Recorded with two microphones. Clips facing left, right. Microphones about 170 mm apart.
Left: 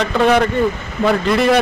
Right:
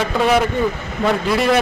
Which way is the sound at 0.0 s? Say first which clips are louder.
Left 2 dB; 5° right (ahead or behind).